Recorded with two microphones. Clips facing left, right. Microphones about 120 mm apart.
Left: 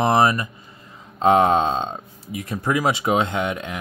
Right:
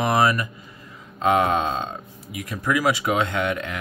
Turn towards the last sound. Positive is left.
turn(degrees=20)  # may be behind; listen again after turning